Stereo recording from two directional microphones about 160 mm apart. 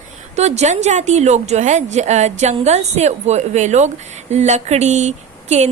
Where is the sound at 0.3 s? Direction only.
45° right (ahead or behind).